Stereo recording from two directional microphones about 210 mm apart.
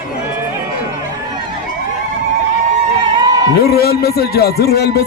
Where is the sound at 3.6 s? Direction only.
45° left (ahead or behind).